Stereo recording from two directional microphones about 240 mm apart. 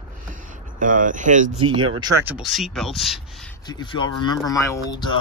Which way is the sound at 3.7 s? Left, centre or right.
Centre.